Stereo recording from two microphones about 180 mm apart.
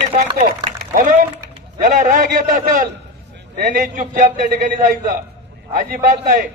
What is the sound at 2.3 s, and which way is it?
A man's voice, 45° right (ahead or behind).